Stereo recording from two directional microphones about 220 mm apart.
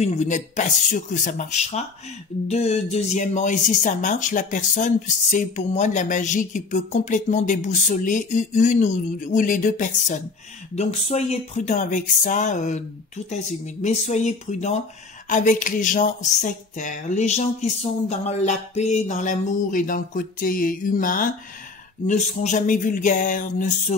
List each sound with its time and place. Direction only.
0.0 s speech: 35° left (ahead or behind)